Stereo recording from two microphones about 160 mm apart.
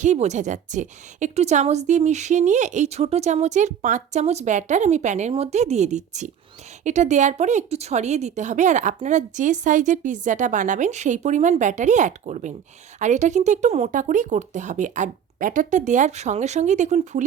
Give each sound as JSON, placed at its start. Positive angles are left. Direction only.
{"t": 0.0, "sound": "a woman's voice", "side_deg": -45}